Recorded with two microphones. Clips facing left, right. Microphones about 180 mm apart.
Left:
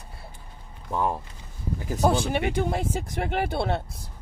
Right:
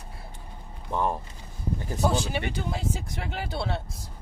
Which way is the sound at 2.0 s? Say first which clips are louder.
Left 4 dB; 55° left (ahead or behind).